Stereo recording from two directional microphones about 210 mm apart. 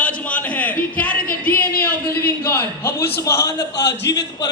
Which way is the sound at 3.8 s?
55° left (ahead or behind).